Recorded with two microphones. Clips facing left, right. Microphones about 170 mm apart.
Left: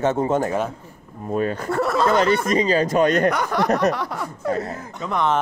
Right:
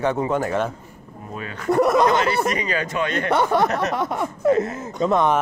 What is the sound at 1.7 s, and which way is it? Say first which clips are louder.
Speech: right 5 dB; 20° right (ahead or behind).